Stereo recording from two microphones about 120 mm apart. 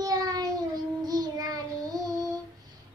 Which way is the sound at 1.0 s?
30° right (ahead or behind).